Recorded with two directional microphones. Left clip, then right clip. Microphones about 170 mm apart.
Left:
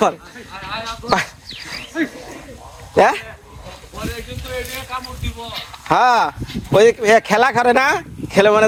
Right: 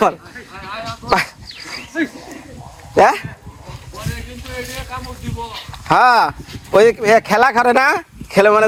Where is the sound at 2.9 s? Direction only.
20° right (ahead or behind).